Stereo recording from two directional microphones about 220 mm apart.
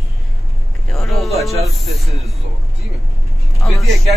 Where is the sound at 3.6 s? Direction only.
5° left (ahead or behind).